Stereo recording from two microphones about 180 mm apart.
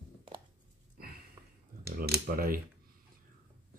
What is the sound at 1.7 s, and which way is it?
Computer keyboard, 55° right (ahead or behind).